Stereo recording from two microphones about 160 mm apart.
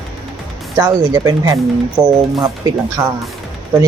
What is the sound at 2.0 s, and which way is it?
Speech, 10° right (ahead or behind).